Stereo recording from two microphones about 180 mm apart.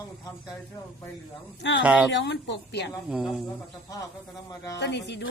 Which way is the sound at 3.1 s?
Centre (ahead or behind).